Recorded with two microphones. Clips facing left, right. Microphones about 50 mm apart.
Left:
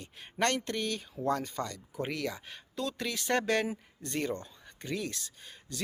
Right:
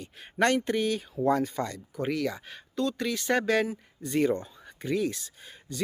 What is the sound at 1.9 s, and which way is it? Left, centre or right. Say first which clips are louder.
Speech: right 7 dB; centre.